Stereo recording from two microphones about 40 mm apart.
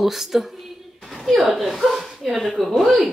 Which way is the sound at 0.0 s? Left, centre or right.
Centre.